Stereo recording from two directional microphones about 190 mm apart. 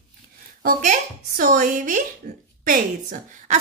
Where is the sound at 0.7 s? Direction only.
45° right (ahead or behind).